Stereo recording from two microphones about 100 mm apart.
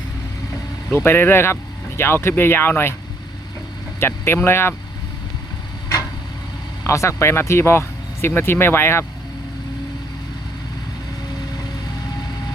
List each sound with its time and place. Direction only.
0.9 s speech: 25° left (ahead or behind)
4.0 s speech: 25° left (ahead or behind)
6.8 s speech: 30° left (ahead or behind)